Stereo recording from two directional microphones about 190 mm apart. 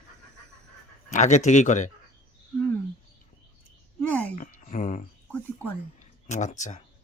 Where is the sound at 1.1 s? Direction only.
40° left (ahead or behind).